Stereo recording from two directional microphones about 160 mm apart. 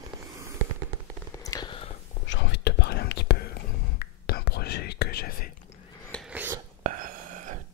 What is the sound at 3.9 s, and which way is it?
Whispering, 75° left (ahead or behind).